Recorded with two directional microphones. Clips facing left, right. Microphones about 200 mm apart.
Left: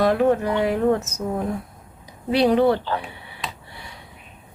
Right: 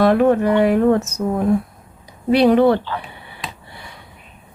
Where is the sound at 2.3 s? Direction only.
60° right (ahead or behind).